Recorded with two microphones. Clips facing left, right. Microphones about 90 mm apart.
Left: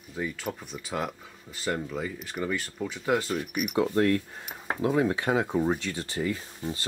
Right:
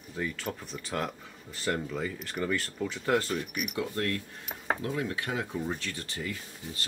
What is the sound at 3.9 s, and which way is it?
Speech, 25° left (ahead or behind).